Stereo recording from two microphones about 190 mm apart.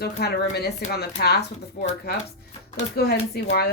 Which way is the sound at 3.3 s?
55° left (ahead or behind).